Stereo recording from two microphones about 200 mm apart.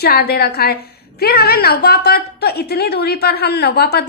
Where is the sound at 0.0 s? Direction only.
50° left (ahead or behind).